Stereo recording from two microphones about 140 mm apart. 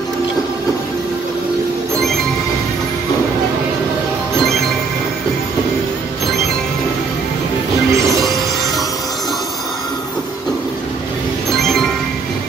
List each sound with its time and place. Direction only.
7.9 s music: 25° right (ahead or behind)
11.6 s music: 5° left (ahead or behind)